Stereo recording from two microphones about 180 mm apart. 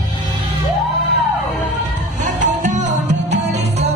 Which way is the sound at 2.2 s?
45° right (ahead or behind).